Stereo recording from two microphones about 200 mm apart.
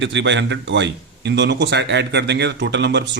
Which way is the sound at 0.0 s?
65° right (ahead or behind).